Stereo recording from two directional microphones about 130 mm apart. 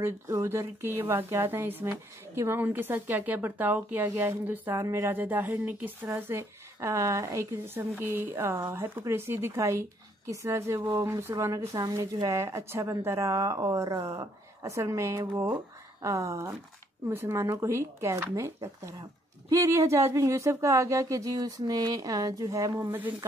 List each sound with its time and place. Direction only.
0.0 s a woman's voice: 20° right (ahead or behind)